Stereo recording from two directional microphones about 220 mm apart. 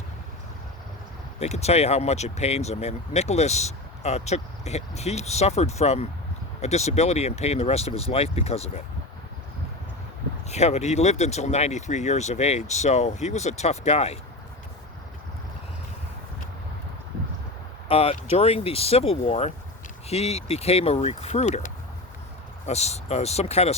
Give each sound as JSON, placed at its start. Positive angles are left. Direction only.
{"t": 1.4, "sound": "speech", "side_deg": 30}
{"t": 10.5, "sound": "speech", "side_deg": 30}
{"t": 17.8, "sound": "speech", "side_deg": 25}